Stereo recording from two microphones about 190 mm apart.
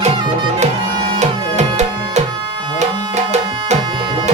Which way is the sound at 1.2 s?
35° right (ahead or behind).